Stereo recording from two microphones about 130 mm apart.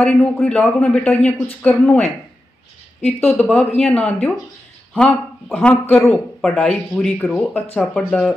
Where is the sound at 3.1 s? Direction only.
10° left (ahead or behind).